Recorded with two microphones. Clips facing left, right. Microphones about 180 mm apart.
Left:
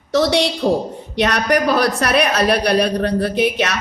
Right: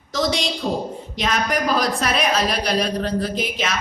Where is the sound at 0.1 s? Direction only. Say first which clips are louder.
Left 7 dB; 65° left (ahead or behind).